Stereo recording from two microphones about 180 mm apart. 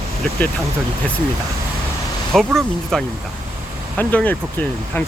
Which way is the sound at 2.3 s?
Centre (ahead or behind).